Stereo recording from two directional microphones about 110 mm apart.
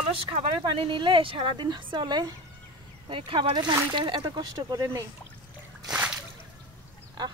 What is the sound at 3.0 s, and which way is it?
A woman's voice, 50° right (ahead or behind).